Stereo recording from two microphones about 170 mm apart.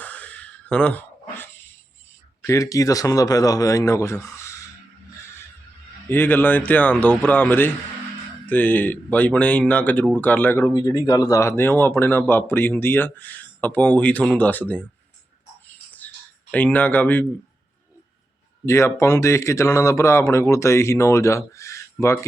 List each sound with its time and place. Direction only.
0.0 s a sound: 10° left (ahead or behind)
2.4 s a man's voice: 20° left (ahead or behind)
6.1 s speech: 10° left (ahead or behind)
10.7 s speech: 25° left (ahead or behind)
15.9 s a sound: 10° left (ahead or behind)
18.6 s speech: 15° left (ahead or behind)